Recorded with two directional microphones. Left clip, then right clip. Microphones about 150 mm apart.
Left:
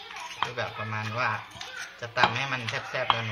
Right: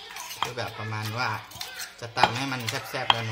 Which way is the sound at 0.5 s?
90° right.